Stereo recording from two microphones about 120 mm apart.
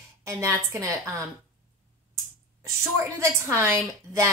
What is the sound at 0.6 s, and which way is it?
Speech, 25° right (ahead or behind).